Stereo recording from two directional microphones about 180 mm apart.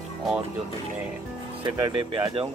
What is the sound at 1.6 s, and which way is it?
Speech, 30° right (ahead or behind).